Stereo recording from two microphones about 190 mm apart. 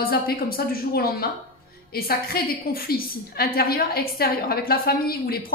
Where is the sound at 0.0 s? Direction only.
50° left (ahead or behind).